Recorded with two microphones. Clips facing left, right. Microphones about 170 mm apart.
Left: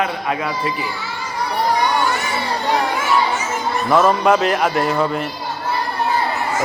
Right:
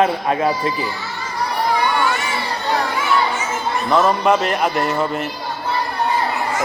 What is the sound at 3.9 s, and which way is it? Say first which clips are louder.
A man's voice: left 1 dB; centre (ahead or behind).